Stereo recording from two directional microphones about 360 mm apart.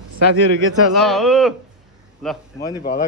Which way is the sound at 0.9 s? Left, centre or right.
Centre.